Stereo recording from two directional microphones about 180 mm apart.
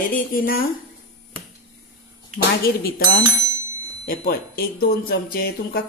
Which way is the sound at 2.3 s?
60° left (ahead or behind).